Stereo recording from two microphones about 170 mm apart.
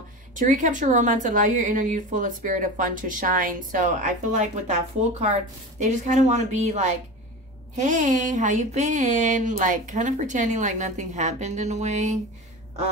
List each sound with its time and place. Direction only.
0.3 s speech: 50° right (ahead or behind)